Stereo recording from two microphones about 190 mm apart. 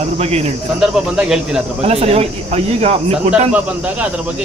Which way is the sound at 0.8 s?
Centre (ahead or behind).